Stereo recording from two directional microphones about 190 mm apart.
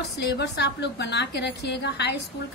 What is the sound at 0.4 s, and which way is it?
A woman's voice, 65° left (ahead or behind).